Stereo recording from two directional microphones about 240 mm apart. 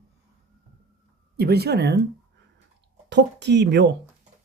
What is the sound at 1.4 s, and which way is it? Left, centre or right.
Speech, right.